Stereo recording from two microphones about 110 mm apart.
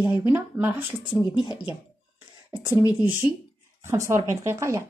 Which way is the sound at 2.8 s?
40° left (ahead or behind).